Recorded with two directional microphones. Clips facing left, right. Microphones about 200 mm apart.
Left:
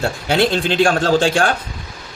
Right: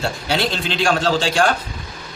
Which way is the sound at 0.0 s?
55° left (ahead or behind).